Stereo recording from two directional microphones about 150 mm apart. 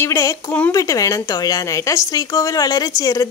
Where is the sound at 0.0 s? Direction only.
20° left (ahead or behind).